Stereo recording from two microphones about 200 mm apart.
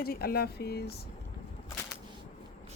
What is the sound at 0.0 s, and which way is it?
Speech, 50° left (ahead or behind).